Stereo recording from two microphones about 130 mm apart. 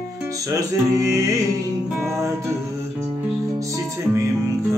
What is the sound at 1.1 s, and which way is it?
Music, 25° right (ahead or behind).